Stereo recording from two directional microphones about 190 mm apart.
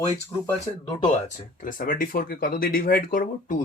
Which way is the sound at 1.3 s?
45° left (ahead or behind).